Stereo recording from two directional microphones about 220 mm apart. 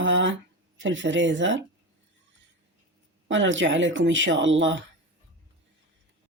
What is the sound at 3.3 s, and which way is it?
Speech, 60° right (ahead or behind).